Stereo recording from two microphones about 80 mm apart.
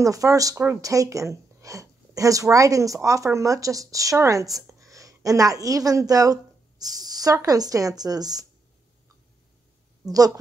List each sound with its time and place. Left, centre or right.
0.0 s a woman's voice: right
10.0 s a woman's voice: right